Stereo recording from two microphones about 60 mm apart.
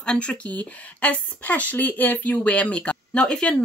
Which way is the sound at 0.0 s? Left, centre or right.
Centre.